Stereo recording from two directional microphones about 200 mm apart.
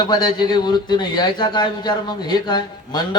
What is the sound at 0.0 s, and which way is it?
A man's voice, 20° left (ahead or behind).